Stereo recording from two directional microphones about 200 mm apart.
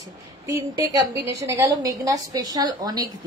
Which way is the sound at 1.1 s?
15° right (ahead or behind).